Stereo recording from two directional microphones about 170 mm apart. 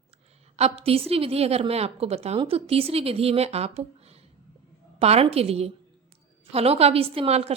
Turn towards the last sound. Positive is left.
turn(degrees=-35)  # may be behind; listen again after turning